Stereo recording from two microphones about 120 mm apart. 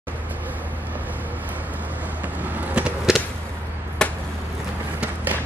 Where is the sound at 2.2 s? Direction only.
10° right (ahead or behind).